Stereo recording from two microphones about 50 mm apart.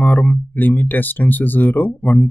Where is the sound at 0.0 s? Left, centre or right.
Left.